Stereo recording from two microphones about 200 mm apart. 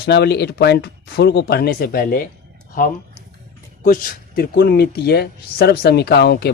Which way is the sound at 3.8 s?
45° left (ahead or behind).